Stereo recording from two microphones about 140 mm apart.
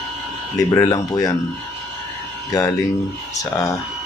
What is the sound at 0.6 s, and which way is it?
Speech, 25° left (ahead or behind).